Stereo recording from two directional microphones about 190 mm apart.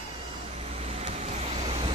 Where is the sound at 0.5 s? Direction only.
35° right (ahead or behind).